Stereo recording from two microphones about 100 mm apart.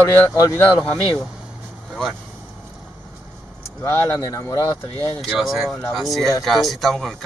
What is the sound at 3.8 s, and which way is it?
Speech, 25° left (ahead or behind).